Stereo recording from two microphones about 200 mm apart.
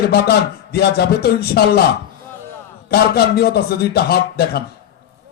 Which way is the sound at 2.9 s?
50° left (ahead or behind).